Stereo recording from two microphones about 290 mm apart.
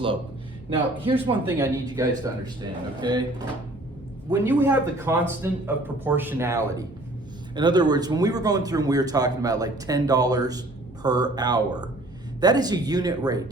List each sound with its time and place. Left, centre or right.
0.7 s a man's voice: centre
1.5 s speech: centre